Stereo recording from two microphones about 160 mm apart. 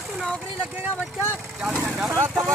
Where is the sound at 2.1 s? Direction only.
20° right (ahead or behind).